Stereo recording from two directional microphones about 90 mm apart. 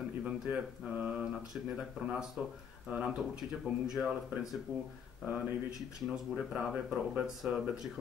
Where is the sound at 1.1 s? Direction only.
10° right (ahead or behind).